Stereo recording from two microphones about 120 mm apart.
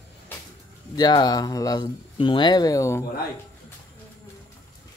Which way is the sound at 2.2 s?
40° left (ahead or behind).